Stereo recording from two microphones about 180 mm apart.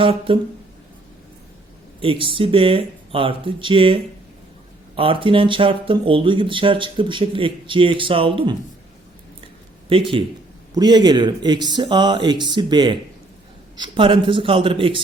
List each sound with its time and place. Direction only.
0.0 s speech: 30° right (ahead or behind)
2.0 s speech: 30° right (ahead or behind)
9.9 s speech: 30° right (ahead or behind)